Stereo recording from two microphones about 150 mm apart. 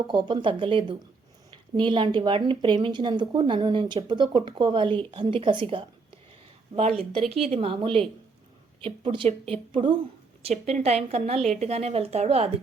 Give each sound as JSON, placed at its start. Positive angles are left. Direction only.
{"t": 0.1, "sound": "speech", "side_deg": -30}
{"t": 7.0, "sound": "speech", "side_deg": -40}
{"t": 10.4, "sound": "speech", "side_deg": -50}